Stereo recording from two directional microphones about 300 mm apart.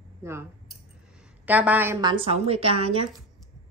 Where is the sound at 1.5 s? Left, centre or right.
Centre.